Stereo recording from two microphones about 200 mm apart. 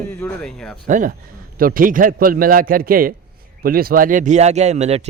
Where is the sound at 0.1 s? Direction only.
5° left (ahead or behind).